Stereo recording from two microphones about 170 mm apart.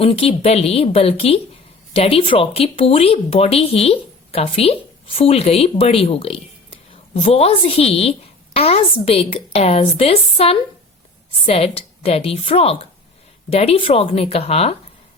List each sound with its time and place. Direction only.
0.0 s speech: 35° left (ahead or behind)